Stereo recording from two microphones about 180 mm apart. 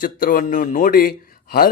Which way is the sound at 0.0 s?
50° left (ahead or behind).